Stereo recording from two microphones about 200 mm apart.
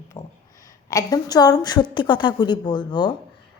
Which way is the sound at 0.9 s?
15° left (ahead or behind).